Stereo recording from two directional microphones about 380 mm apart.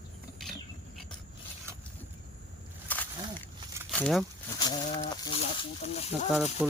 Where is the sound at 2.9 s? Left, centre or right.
Centre.